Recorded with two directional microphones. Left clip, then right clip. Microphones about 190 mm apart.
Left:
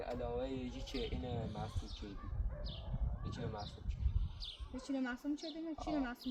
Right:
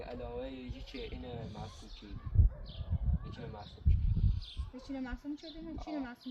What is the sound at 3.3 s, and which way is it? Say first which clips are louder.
Speech: left 5 dB; 15° left (ahead or behind).